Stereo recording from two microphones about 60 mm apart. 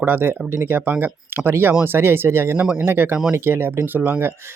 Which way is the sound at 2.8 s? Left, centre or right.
Right.